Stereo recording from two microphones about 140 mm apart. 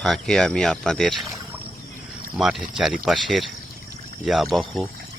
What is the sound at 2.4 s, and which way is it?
Speech, centre (ahead or behind).